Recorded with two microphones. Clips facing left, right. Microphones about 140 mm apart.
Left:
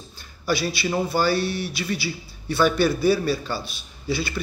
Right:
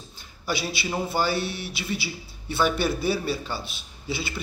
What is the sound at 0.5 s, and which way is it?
A man's voice, 20° right (ahead or behind).